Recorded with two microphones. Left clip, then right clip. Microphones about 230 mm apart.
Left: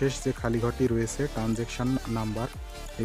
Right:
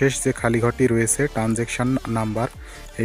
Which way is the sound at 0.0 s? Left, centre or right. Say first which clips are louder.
Right 8 dB; right.